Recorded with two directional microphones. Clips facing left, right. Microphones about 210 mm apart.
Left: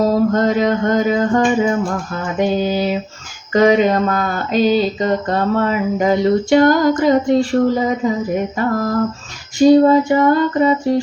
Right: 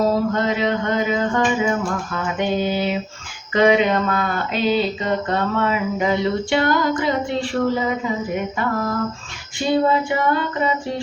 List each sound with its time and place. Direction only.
0.0 s speech: 45° left (ahead or behind)
8.0 s a sound: 40° left (ahead or behind)
8.5 s speech: 40° left (ahead or behind)